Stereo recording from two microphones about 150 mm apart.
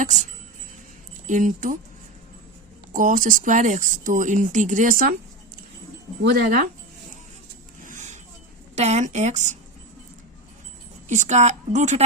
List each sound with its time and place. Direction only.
0.0 s speech: 55° right (ahead or behind)
1.3 s speech: 55° right (ahead or behind)
2.9 s speech: 60° right (ahead or behind)
6.2 s speech: 70° right (ahead or behind)
7.9 s vehicle: 55° right (ahead or behind)
8.7 s a woman's voice: 50° right (ahead or behind)
11.1 s a woman's voice: 50° right (ahead or behind)